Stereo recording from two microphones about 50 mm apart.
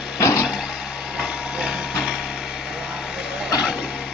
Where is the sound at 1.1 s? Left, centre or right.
Centre.